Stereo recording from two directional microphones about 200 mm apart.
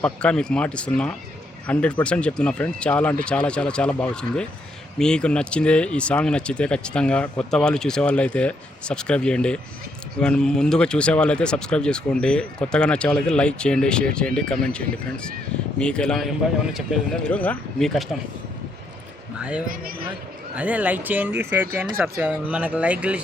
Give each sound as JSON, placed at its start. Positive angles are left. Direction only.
{"t": 0.0, "sound": "speech", "side_deg": 5}
{"t": 19.4, "sound": "speech", "side_deg": -5}
{"t": 19.6, "sound": "speech", "side_deg": -45}
{"t": 20.6, "sound": "speech", "side_deg": -5}